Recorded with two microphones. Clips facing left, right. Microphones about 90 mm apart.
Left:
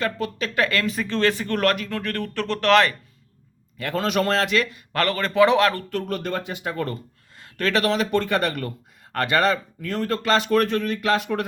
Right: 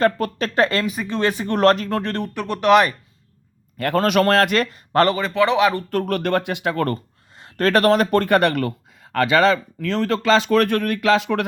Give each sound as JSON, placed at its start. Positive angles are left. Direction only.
{"t": 0.0, "sound": "speech", "side_deg": -40}
{"t": 0.9, "sound": "speech", "side_deg": -15}
{"t": 1.7, "sound": "speech", "side_deg": -35}
{"t": 2.3, "sound": "speech", "side_deg": -10}
{"t": 3.8, "sound": "speech", "side_deg": -55}
{"t": 5.3, "sound": "speech", "side_deg": 5}
{"t": 5.9, "sound": "speech", "side_deg": -60}
{"t": 7.5, "sound": "speech", "side_deg": -45}
{"t": 9.8, "sound": "speech", "side_deg": -90}